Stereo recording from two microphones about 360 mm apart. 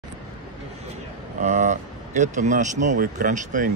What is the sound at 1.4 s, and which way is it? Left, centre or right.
Speech, centre.